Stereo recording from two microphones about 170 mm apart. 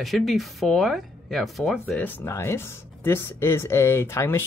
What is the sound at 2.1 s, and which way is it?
Speech, 15° left (ahead or behind).